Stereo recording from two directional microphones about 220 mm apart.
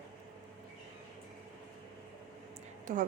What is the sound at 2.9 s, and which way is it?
Speech, 35° right (ahead or behind).